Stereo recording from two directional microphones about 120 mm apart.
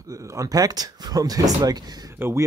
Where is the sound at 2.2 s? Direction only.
20° right (ahead or behind).